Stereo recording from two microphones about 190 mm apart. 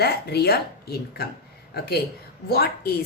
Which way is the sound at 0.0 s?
55° left (ahead or behind).